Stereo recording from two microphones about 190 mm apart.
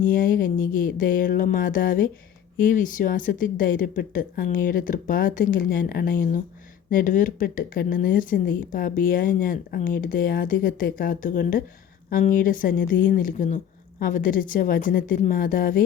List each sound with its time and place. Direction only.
0.0 s speech: 45° left (ahead or behind)